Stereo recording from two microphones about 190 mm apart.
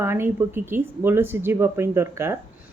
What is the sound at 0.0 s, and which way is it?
Speech, 10° right (ahead or behind).